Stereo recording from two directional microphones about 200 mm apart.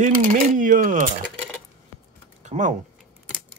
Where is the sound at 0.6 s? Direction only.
40° right (ahead or behind).